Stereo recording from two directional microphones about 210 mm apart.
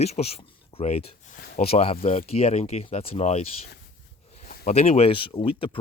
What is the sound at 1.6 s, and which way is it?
Speech, 30° left (ahead or behind).